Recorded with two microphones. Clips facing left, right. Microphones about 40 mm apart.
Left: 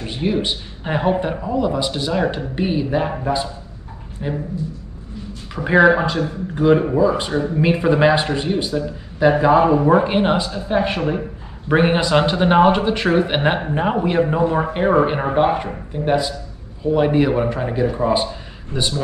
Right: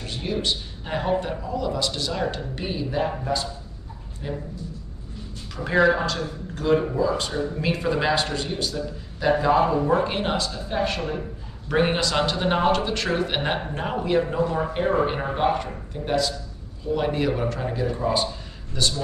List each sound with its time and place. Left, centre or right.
0.0 s a man's voice: left
5.5 s a man's voice: left